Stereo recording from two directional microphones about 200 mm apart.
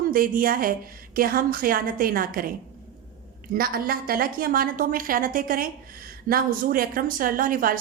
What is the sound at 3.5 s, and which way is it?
A woman's voice, 50° right (ahead or behind).